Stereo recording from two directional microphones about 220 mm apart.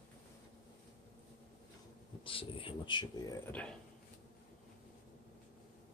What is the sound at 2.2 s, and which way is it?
Speech, 25° left (ahead or behind).